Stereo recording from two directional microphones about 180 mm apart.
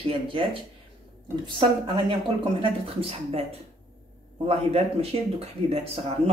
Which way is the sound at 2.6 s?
30° right (ahead or behind).